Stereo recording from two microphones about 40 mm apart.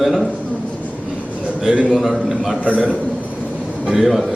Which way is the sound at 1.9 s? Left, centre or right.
Centre.